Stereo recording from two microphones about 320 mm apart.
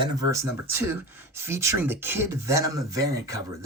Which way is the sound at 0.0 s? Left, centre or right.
Centre.